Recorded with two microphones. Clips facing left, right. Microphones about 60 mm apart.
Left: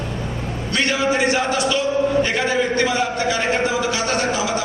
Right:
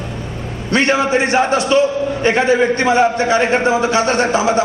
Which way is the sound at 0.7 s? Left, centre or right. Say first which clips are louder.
Right 5 dB; right.